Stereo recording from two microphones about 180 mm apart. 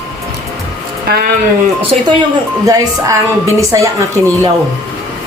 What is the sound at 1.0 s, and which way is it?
Speech, 60° right (ahead or behind).